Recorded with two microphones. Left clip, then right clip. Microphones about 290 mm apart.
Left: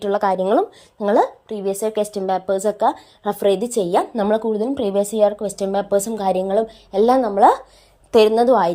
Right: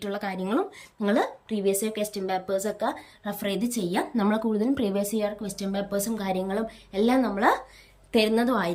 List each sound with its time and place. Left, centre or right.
0.0 s a woman's voice: centre
4.5 s speech: left
5.0 s a woman's voice: centre